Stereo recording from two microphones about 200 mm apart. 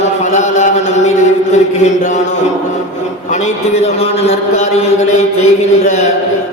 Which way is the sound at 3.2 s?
35° left (ahead or behind).